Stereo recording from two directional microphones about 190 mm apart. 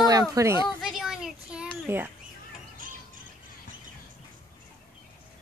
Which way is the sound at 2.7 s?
45° right (ahead or behind).